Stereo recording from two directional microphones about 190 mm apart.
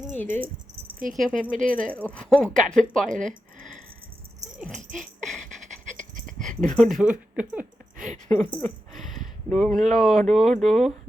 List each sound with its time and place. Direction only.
0.2 s speech: 10° left (ahead or behind)
0.9 s speech: 45° right (ahead or behind)
1.9 s speech: 5° left (ahead or behind)
4.8 s speech: 45° right (ahead or behind)
5.9 s a sound: 40° right (ahead or behind)
6.5 s speech: 40° right (ahead or behind)
6.9 s speech: 5° right (ahead or behind)
7.9 s speech: 45° right (ahead or behind)
8.3 s speech: 10° left (ahead or behind)
8.9 s a sound: centre (ahead or behind)
9.5 s speech: centre (ahead or behind)